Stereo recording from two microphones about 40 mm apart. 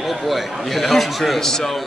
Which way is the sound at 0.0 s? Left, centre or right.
Centre.